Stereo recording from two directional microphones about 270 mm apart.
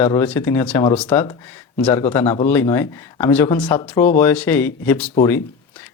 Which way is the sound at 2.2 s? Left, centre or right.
Left.